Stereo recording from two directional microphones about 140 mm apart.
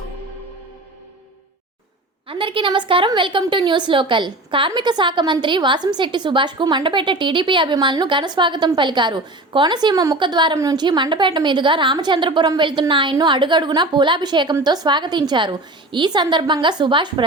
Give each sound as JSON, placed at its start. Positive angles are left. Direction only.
{"t": 2.2, "sound": "a woman's voice", "side_deg": -40}